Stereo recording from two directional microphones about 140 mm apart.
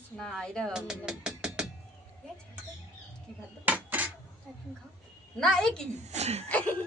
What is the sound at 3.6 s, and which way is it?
Cutlery, 10° right (ahead or behind).